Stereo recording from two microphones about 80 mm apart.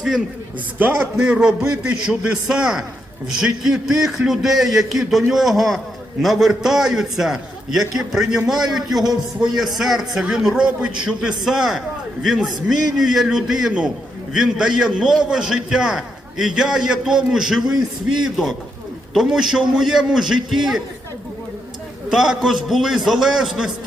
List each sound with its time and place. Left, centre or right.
0.8 s a man's voice: right; by 17.6 s centre
19.1 s a man's voice: centre
22.1 s a man's voice: centre